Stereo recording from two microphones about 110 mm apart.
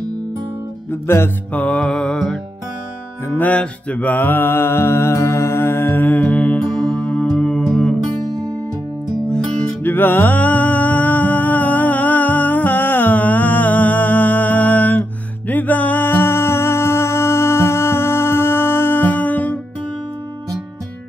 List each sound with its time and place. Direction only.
1.0 s music: 20° left (ahead or behind)
3.3 s mantra: 15° left (ahead or behind)
9.3 s music: 10° left (ahead or behind)